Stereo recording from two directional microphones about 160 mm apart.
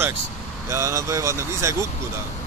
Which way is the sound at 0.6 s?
20° right (ahead or behind).